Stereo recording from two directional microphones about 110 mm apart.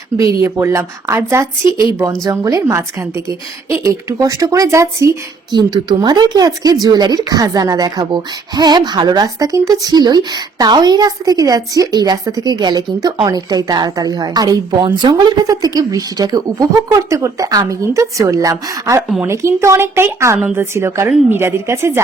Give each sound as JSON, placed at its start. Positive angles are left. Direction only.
{"t": 0.4, "sound": "speech", "side_deg": -25}
{"t": 5.5, "sound": "speech", "side_deg": -40}